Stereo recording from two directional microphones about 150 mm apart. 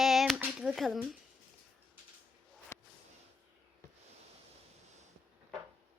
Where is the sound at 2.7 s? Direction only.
20° left (ahead or behind).